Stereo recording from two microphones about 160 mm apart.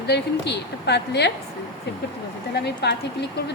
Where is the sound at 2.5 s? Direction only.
90° left.